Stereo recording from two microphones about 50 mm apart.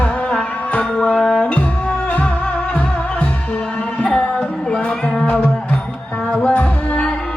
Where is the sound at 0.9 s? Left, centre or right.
Centre.